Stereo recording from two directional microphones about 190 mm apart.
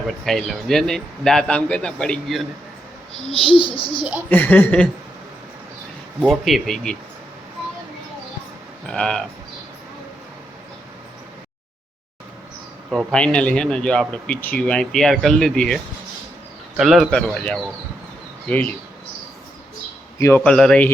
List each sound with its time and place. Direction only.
0.1 s speech: centre (ahead or behind)
3.5 s a child's voice: 25° left (ahead or behind)
4.3 s speech: 10° left (ahead or behind)
6.4 s speech: centre (ahead or behind)
8.9 s speech: 5° left (ahead or behind)
12.9 s speech: centre (ahead or behind)
20.1 s speech: 15° left (ahead or behind)